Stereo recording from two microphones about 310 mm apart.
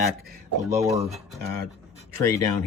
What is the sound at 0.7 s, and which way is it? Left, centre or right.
Speech, centre.